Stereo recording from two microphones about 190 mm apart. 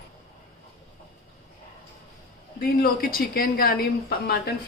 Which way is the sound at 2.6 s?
50° left (ahead or behind).